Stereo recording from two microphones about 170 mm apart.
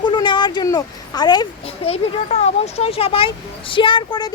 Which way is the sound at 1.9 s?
40° left (ahead or behind).